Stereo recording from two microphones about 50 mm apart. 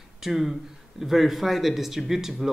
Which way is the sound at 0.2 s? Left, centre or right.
Centre.